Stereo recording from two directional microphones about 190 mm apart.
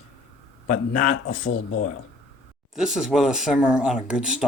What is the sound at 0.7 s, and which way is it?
Speech, 45° left (ahead or behind).